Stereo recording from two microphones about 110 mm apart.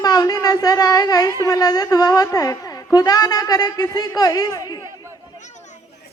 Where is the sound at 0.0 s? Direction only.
35° left (ahead or behind).